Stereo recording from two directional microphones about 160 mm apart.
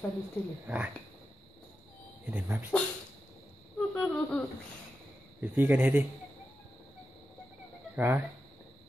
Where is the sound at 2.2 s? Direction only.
10° right (ahead or behind).